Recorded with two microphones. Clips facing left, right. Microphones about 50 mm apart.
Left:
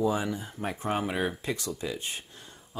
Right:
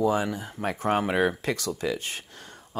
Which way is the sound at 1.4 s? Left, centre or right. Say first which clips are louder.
Right 5 dB; right.